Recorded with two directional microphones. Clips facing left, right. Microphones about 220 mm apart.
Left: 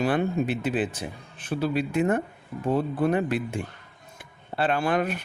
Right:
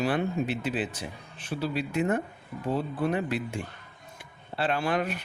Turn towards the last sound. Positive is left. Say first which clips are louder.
# left 3 dB
turn(degrees=50)  # may be behind; listen again after turning